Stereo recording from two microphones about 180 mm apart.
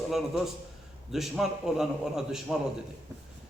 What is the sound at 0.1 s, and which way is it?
A man's voice, centre (ahead or behind).